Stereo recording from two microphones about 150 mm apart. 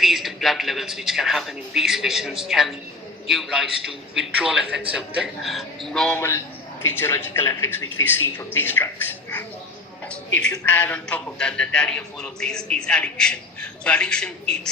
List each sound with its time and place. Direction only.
0.0 s a man's voice: centre (ahead or behind)
6.1 s a man's voice: 15° left (ahead or behind)